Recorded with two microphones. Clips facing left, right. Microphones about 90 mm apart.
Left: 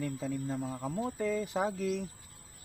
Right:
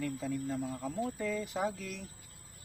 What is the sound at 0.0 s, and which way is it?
Speech, 35° left (ahead or behind).